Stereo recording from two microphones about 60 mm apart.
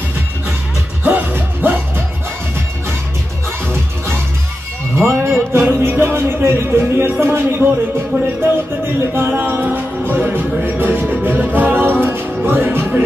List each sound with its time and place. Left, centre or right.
1.0 s music: right
4.9 s music: right